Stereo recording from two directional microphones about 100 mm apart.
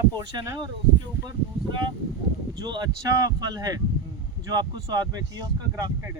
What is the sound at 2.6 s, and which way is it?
Speech, 45° right (ahead or behind).